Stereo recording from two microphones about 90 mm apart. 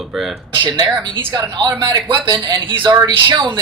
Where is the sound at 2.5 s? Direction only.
65° right (ahead or behind).